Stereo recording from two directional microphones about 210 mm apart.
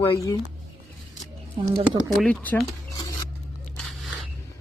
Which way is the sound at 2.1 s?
5° left (ahead or behind).